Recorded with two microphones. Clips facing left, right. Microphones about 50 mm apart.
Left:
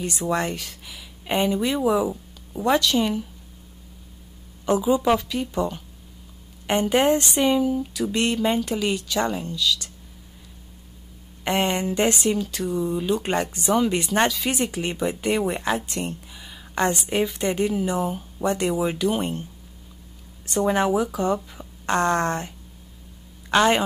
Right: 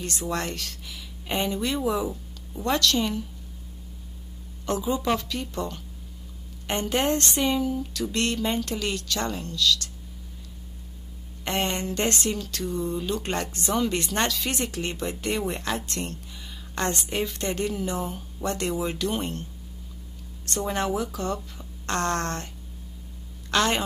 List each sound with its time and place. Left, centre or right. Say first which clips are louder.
0.0 s speech: left 5 dB; centre
4.6 s speech: left 6 dB; centre
11.4 s speech: left 5 dB; centre
20.4 s speech: left 6 dB; centre
23.5 s a woman's voice: left 5 dB; centre